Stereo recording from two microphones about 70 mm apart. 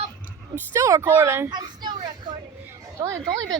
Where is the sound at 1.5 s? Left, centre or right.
Right.